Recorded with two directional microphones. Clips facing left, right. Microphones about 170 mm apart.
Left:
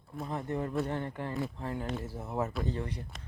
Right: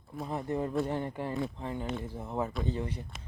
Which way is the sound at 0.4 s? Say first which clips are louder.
Right 3 dB; 25° right (ahead or behind).